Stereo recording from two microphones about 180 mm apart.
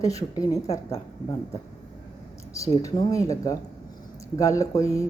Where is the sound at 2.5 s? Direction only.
20° left (ahead or behind).